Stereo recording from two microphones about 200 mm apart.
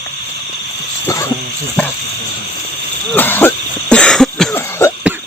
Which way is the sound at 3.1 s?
10° left (ahead or behind).